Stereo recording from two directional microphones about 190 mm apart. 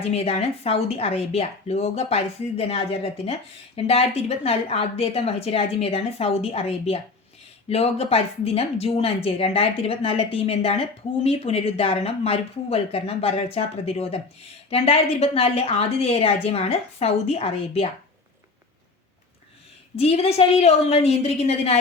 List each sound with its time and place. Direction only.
0.1 s speech: 35° left (ahead or behind)
20.0 s speech: 30° left (ahead or behind)